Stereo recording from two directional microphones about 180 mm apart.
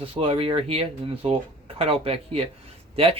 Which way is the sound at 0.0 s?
30° right (ahead or behind).